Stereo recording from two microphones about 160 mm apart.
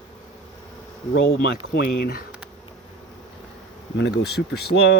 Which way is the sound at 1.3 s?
85° left.